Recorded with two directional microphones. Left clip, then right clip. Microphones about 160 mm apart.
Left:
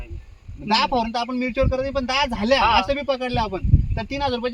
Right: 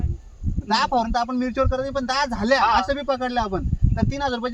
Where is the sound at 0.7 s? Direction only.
5° left (ahead or behind).